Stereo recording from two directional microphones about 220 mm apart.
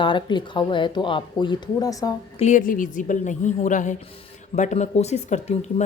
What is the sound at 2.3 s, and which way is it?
Speech, 35° left (ahead or behind).